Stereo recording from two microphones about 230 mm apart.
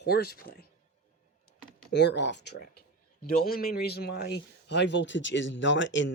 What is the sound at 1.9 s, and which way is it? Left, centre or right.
Speech, left.